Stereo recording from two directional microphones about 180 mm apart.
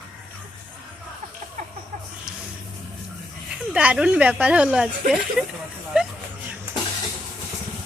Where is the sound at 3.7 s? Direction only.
5° right (ahead or behind).